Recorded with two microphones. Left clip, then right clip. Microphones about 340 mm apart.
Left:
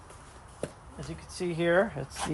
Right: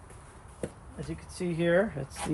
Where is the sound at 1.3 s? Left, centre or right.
Centre.